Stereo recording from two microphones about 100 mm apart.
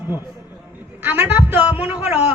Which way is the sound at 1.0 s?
20° right (ahead or behind).